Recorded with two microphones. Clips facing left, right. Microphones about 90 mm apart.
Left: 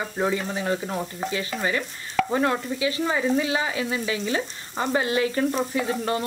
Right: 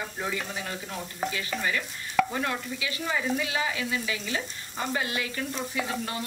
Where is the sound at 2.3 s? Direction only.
35° left (ahead or behind).